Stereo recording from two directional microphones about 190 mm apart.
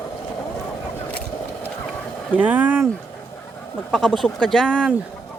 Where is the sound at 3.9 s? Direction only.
Centre (ahead or behind).